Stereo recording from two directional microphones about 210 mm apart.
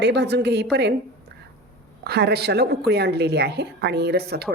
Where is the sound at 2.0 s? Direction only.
50° right (ahead or behind).